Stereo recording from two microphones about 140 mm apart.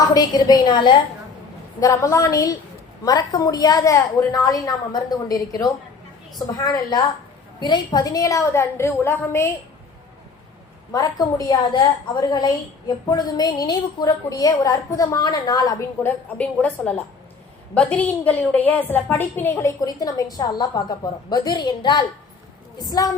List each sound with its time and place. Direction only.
0.1 s a woman's voice: 30° left (ahead or behind)
10.9 s a woman's voice: 25° left (ahead or behind)
16.0 s a woman's voice: 10° left (ahead or behind); by 23.1 s 25° left (ahead or behind)